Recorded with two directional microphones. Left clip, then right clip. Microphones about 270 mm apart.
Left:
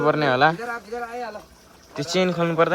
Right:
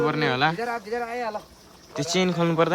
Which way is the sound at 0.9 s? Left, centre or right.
Right.